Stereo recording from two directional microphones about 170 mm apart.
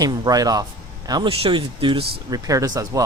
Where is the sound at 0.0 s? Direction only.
25° right (ahead or behind).